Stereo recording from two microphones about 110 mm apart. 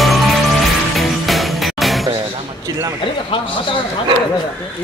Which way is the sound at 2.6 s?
30° right (ahead or behind).